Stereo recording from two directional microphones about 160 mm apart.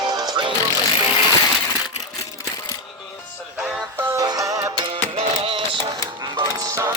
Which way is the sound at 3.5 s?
5° right (ahead or behind).